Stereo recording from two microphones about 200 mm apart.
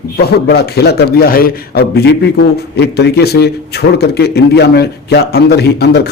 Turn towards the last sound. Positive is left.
turn(degrees=55)  # may be behind; listen again after turning